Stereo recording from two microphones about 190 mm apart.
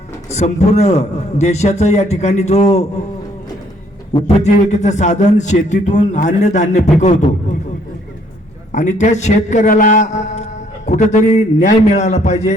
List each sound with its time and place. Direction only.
0.3 s a man's voice: 35° left (ahead or behind)
4.4 s a man's voice: 35° left (ahead or behind)
8.7 s a man's voice: 40° left (ahead or behind)